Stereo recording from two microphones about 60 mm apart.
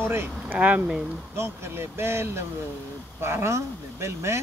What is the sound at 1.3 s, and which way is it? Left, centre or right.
Speech, right.